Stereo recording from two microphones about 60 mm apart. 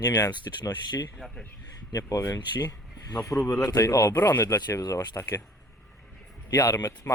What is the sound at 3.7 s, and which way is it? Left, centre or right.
Speech, left.